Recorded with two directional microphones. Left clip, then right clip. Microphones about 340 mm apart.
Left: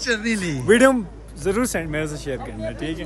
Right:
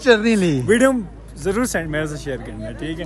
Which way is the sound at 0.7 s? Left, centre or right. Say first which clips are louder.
Left 2 dB; centre.